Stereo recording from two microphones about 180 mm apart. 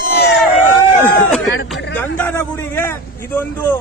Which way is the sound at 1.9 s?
10° left (ahead or behind).